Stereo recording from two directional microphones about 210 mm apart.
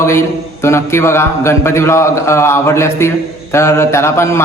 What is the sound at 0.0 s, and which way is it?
Speech, 10° left (ahead or behind).